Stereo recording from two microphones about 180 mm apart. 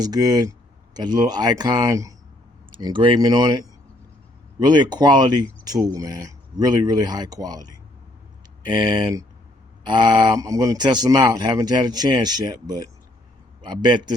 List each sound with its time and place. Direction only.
0.0 s speech: 20° right (ahead or behind)
4.6 s speech: 25° right (ahead or behind)